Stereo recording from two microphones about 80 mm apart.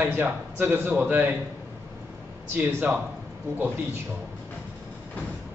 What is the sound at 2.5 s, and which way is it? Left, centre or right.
Speech, right.